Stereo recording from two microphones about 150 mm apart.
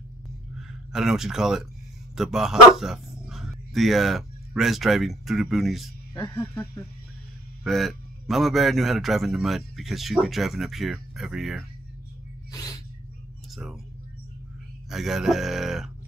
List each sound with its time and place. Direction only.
0.6 s speech: 5° right (ahead or behind)
6.3 s speech: 15° left (ahead or behind)
7.6 s a man's voice: centre (ahead or behind)
12.4 s a sound: 25° left (ahead or behind)
14.9 s a man's voice: centre (ahead or behind)